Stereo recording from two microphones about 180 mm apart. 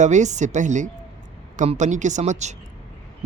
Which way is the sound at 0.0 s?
40° right (ahead or behind).